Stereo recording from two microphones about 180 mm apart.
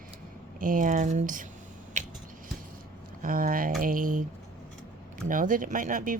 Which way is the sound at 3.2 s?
50° right (ahead or behind).